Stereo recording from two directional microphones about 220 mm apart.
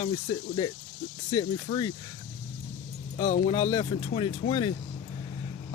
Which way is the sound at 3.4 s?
20° left (ahead or behind).